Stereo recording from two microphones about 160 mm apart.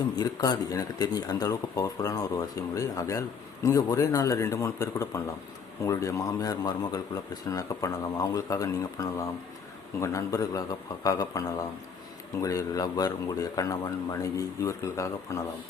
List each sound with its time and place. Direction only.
0.2 s speech: 25° left (ahead or behind)